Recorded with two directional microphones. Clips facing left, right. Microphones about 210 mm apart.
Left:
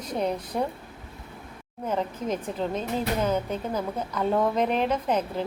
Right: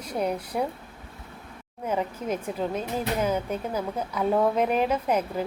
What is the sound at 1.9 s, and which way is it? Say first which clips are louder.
A woman's voice: even; 10° right (ahead or behind).